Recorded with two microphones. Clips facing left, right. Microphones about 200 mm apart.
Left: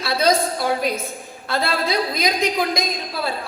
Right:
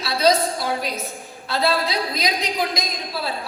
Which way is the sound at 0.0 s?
50° left (ahead or behind).